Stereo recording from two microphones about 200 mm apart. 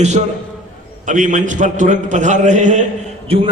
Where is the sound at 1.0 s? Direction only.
40° right (ahead or behind).